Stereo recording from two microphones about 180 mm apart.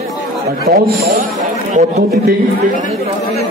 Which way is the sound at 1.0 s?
60° right (ahead or behind).